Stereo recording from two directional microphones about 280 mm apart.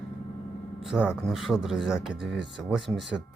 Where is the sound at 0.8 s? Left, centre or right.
Centre.